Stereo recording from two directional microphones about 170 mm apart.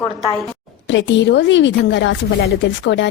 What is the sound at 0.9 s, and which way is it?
Speech, 90° left.